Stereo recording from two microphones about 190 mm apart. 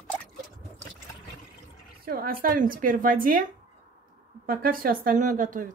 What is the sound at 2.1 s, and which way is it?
A woman's voice, 50° right (ahead or behind).